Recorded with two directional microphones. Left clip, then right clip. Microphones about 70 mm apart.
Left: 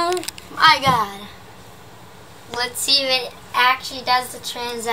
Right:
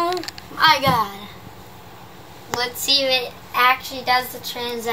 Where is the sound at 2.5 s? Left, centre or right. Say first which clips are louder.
Even; left.